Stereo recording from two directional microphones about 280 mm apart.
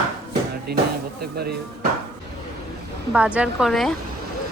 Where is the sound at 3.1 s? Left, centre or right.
Centre.